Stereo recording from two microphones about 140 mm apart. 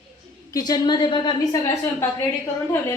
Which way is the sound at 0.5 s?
30° left (ahead or behind).